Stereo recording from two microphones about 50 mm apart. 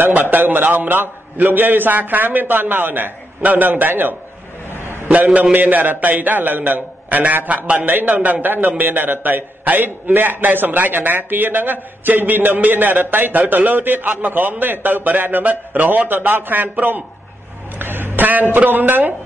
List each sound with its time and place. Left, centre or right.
0.0 s speech: right
5.0 s speech: right
17.7 s speech: right